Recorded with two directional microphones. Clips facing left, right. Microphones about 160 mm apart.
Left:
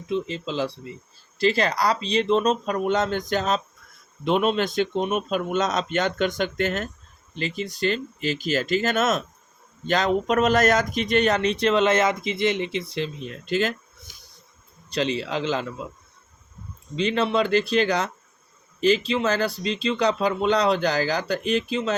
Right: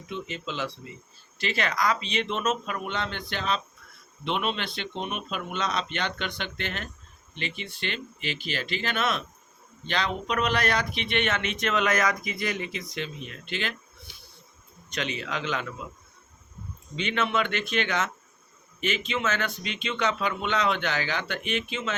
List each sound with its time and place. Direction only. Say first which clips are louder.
0.1 s speech: left 8 dB; 30° left (ahead or behind)
17.0 s speech: left 5 dB; 35° left (ahead or behind)